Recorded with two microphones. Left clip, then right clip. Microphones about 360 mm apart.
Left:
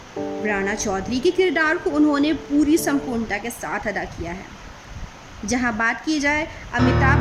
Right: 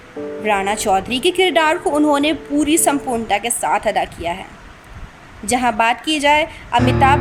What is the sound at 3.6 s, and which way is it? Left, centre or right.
Speech, right.